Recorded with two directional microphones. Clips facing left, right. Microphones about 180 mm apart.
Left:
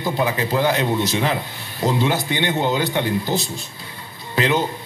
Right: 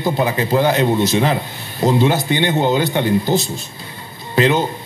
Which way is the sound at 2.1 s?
25° right (ahead or behind).